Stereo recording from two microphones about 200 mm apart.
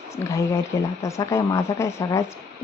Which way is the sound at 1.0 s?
15° left (ahead or behind).